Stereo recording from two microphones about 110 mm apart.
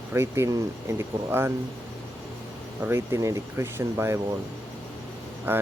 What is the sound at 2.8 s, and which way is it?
Speech, 25° right (ahead or behind).